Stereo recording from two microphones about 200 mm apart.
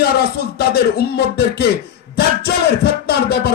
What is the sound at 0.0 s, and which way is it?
Speech, 50° left (ahead or behind).